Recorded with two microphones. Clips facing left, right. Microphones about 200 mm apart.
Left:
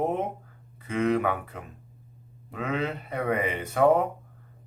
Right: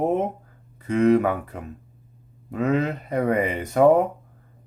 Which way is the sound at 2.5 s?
40° right (ahead or behind).